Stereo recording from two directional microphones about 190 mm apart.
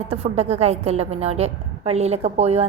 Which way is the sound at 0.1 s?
35° right (ahead or behind).